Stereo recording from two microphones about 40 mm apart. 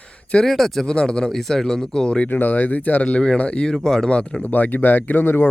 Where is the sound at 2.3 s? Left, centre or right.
Left.